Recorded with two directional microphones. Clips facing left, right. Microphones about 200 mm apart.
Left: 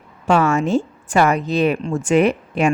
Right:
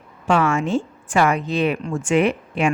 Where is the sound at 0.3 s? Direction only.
40° left (ahead or behind).